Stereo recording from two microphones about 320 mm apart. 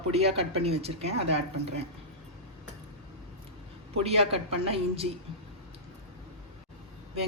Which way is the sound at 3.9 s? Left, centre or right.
Centre.